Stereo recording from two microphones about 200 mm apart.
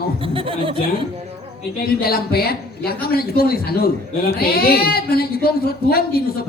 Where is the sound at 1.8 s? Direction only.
50° left (ahead or behind).